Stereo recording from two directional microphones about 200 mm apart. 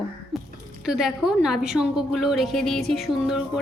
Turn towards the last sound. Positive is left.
turn(degrees=0)  # may be behind; listen again after turning